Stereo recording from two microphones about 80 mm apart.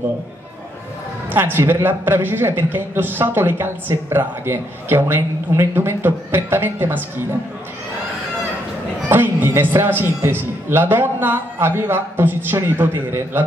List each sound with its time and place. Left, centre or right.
1.3 s a man's voice: right
9.1 s a man's voice: right